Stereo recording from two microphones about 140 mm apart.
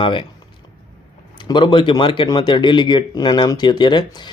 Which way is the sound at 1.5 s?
35° left (ahead or behind).